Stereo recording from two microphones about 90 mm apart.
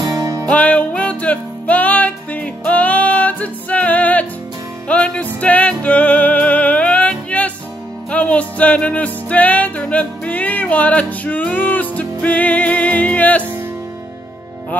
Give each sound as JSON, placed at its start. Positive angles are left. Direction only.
{"t": 0.0, "sound": "music", "side_deg": -40}
{"t": 0.5, "sound": "music", "side_deg": 15}